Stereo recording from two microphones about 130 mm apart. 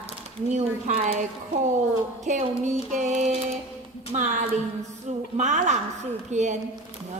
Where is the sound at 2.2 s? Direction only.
70° right (ahead or behind).